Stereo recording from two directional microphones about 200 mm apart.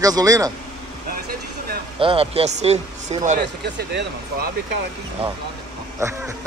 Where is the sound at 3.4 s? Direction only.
55° right (ahead or behind).